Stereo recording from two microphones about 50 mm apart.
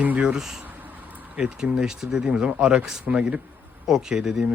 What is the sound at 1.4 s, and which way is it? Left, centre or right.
A man's voice, centre.